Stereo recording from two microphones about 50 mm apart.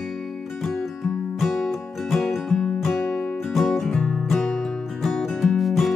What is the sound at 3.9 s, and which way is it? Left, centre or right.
Music, centre.